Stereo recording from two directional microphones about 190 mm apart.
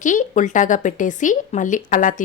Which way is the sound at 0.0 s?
40° left (ahead or behind).